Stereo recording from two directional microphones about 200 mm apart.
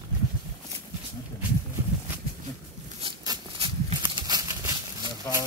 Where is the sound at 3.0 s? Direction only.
25° right (ahead or behind).